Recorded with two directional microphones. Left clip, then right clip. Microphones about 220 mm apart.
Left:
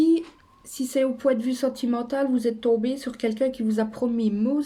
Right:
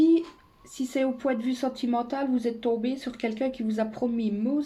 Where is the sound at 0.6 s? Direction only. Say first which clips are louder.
Left 4 dB; 45° left (ahead or behind).